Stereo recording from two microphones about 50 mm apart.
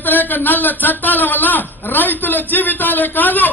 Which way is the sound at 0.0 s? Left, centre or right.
Left.